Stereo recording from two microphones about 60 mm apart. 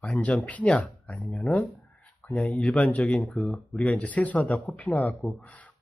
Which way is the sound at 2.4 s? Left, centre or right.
Left.